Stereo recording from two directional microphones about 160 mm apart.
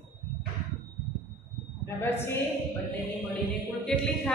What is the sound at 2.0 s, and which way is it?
Speech, 15° left (ahead or behind).